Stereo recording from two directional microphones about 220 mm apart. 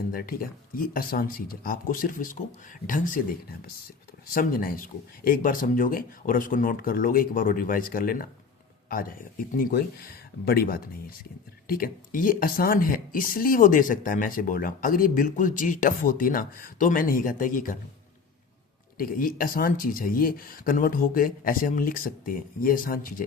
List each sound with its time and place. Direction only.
0.1 s speech: 40° left (ahead or behind)
4.4 s speech: 40° left (ahead or behind)
18.9 s speech: 40° left (ahead or behind)